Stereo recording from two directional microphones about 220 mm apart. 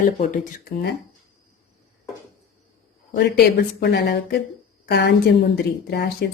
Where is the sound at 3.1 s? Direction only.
50° left (ahead or behind).